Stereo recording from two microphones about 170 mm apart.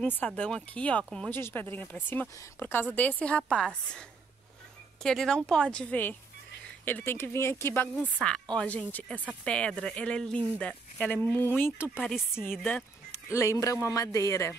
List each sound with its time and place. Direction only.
0.0 s speech: 10° left (ahead or behind)
5.0 s speech: 5° left (ahead or behind)
8.2 s speech: 5° left (ahead or behind)
12.0 s speech: centre (ahead or behind)
13.1 s speech: 15° left (ahead or behind)